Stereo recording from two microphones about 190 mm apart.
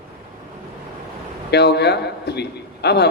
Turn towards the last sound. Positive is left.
turn(degrees=60)  # may be behind; listen again after turning